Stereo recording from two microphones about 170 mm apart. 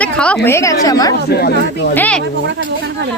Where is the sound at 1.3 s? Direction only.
70° left (ahead or behind).